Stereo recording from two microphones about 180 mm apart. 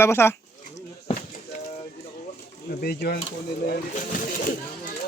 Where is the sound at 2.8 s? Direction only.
60° left (ahead or behind).